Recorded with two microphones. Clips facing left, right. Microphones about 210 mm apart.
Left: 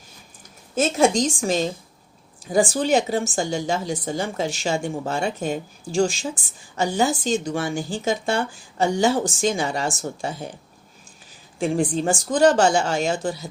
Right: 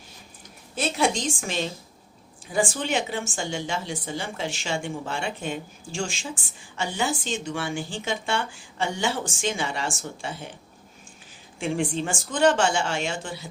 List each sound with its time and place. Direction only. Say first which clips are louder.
0.8 s a woman's voice: left 6 dB; 45° left (ahead or behind)
11.6 s a woman's voice: left 5 dB; 40° left (ahead or behind)